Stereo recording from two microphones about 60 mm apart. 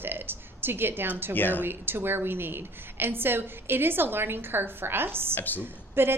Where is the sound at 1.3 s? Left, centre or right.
Left.